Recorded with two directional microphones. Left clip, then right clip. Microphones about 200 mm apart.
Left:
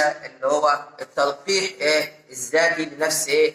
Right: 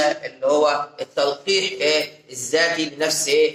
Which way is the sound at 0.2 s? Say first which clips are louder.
Right 3 dB; 40° right (ahead or behind).